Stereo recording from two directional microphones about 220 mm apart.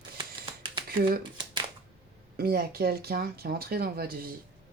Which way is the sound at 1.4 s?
20° right (ahead or behind).